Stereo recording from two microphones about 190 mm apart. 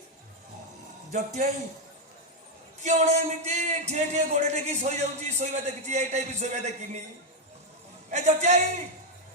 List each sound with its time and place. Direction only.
1.1 s a man's voice: 40° right (ahead or behind)
2.8 s a man's voice: 40° right (ahead or behind)
8.1 s a man's voice: 35° right (ahead or behind)